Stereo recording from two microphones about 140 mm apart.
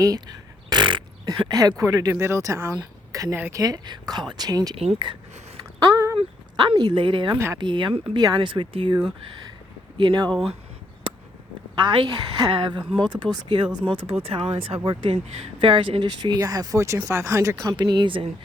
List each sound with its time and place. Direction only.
0.0 s a woman's voice: 30° right (ahead or behind)
4.8 s speech: 40° right (ahead or behind)
5.9 s a sound: 20° right (ahead or behind)
6.1 s speech: 35° right (ahead or behind)
7.3 s speech: 20° right (ahead or behind)
7.6 s speech: 35° right (ahead or behind)
11.1 s a sound: 35° right (ahead or behind)
11.8 s speech: 30° right (ahead or behind)